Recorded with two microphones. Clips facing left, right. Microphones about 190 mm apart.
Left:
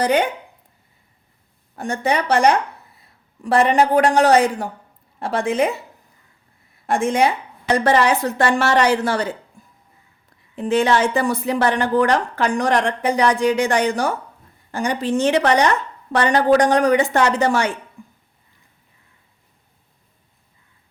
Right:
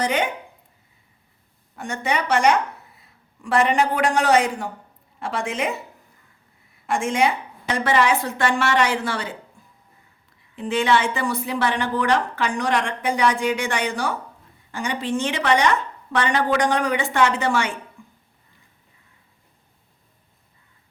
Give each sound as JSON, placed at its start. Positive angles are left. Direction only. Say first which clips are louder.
{"t": 0.0, "sound": "a woman's voice", "louder": "left 5 dB", "side_deg": 35}
{"t": 1.7, "sound": "a woman's voice", "louder": "left 4 dB", "side_deg": 35}
{"t": 6.8, "sound": "a woman's voice", "louder": "left 3 dB", "side_deg": 35}
{"t": 10.5, "sound": "a woman's voice", "louder": "left 3 dB", "side_deg": 45}
{"t": 18.0, "sound": "a sound", "louder": "left 5 dB", "side_deg": 40}